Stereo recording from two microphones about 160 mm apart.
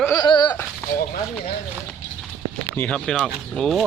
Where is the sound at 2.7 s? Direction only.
10° left (ahead or behind).